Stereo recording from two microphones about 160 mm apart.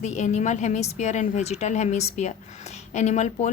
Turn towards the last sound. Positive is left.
turn(degrees=45)  # may be behind; listen again after turning